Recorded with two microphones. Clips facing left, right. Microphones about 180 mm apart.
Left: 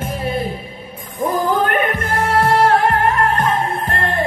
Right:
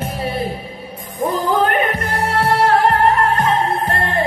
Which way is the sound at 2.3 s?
40° left (ahead or behind).